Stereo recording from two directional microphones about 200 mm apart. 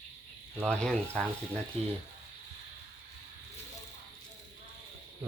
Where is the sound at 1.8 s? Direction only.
30° right (ahead or behind).